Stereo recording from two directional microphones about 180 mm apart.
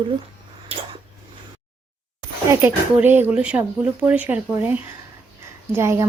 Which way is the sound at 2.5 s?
10° right (ahead or behind).